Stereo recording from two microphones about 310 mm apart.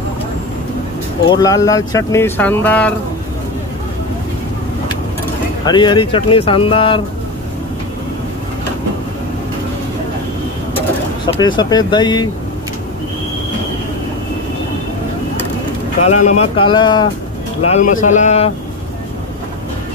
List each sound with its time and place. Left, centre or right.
1.3 s speech: centre
5.7 s speech: centre
11.3 s speech: centre
16.3 s speech: centre